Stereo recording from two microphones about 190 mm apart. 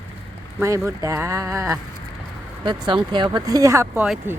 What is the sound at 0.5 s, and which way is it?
Speech, 15° right (ahead or behind).